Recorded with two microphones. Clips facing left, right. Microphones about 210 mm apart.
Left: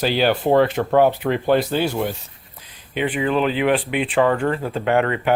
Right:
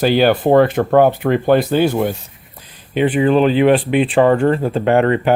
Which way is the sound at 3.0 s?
40° right (ahead or behind).